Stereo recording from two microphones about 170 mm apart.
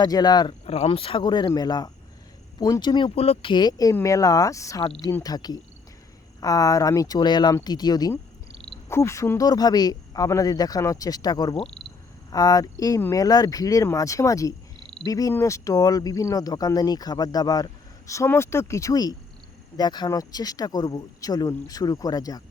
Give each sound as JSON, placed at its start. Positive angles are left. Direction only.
{"t": 0.0, "sound": "speech", "side_deg": 25}
{"t": 0.6, "sound": "speech", "side_deg": 35}